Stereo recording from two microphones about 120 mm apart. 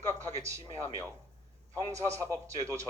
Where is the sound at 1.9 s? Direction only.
25° right (ahead or behind).